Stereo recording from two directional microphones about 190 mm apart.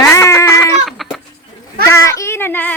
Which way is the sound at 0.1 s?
15° left (ahead or behind).